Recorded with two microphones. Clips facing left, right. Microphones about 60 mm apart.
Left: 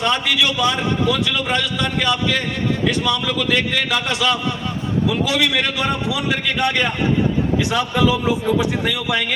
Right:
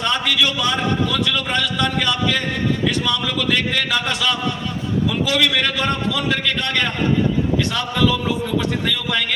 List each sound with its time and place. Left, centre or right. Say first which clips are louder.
0.0 s a man's voice: left 1 dB; centre